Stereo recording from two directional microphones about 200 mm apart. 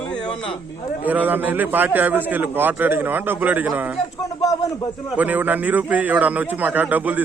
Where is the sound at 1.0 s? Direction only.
10° right (ahead or behind).